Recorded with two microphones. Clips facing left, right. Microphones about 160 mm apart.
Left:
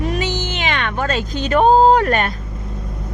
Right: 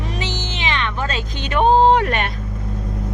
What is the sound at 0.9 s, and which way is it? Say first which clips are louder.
Speech: left 4 dB; 50° left (ahead or behind).